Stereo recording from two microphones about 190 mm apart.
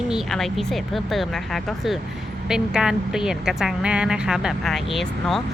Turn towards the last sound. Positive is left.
turn(degrees=0)  # may be behind; listen again after turning